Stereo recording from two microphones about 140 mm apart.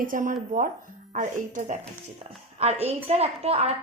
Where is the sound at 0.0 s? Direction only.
70° right (ahead or behind).